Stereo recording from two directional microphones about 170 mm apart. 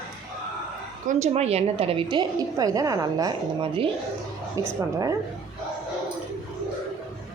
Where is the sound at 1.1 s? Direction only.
40° right (ahead or behind); by 3.3 s 20° right (ahead or behind).